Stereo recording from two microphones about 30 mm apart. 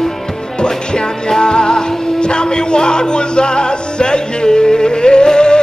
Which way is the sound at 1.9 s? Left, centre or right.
Centre.